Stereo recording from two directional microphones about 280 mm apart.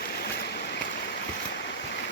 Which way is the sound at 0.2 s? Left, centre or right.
Left.